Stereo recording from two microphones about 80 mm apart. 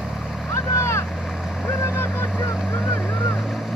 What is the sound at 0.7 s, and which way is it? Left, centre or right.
Boat, left.